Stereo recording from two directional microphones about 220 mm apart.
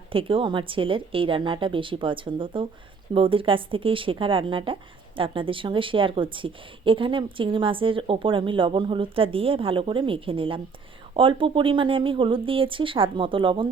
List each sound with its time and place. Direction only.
0.1 s speech: 25° right (ahead or behind)